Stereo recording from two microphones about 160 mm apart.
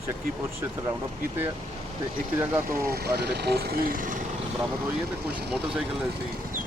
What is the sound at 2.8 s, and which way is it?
Speech, 75° right (ahead or behind).